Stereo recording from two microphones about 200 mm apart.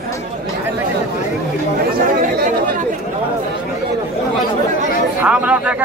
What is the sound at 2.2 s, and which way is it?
Chatter, 45° right (ahead or behind).